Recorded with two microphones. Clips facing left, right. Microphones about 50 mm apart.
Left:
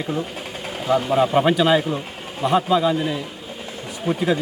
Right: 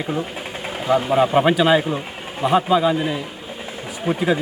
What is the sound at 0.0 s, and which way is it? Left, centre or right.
A man's voice, centre.